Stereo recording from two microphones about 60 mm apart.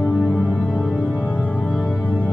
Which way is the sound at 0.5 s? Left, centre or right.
Centre.